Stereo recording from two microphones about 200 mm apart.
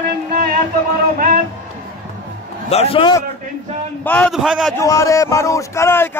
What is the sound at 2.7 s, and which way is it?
Speech, 30° left (ahead or behind).